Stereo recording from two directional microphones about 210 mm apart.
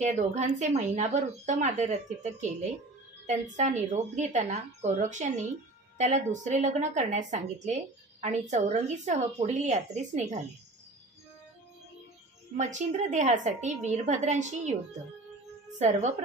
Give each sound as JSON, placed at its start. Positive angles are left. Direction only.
{"t": 0.0, "sound": "a woman's voice", "side_deg": -35}
{"t": 12.5, "sound": "a woman's voice", "side_deg": -35}
{"t": 15.8, "sound": "a woman's voice", "side_deg": -35}